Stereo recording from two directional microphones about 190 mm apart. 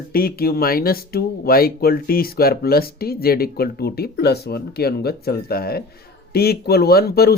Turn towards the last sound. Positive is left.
turn(degrees=55)  # may be behind; listen again after turning